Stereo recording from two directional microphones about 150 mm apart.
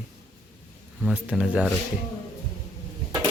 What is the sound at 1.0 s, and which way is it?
Speech, 5° right (ahead or behind).